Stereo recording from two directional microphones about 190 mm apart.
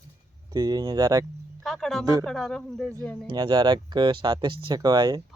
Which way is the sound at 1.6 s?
Centre (ahead or behind).